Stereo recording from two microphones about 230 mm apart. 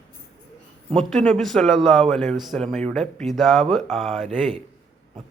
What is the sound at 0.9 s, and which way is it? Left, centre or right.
A man's voice, centre.